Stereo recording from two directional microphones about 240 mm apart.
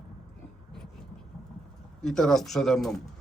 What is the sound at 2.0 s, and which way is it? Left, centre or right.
Speech, centre.